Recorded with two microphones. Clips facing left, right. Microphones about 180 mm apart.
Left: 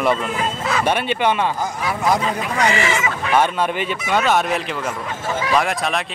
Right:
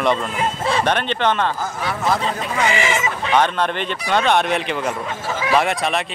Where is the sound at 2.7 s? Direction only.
15° right (ahead or behind).